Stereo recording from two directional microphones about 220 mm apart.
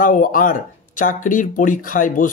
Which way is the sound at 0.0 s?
35° left (ahead or behind).